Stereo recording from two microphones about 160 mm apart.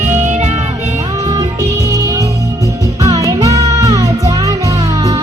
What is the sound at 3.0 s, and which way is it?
Music, 20° right (ahead or behind).